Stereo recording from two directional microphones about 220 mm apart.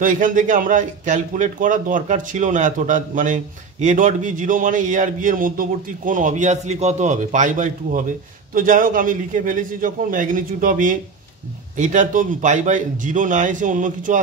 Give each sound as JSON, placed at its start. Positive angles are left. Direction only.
{"t": 0.0, "sound": "a man's voice", "side_deg": -35}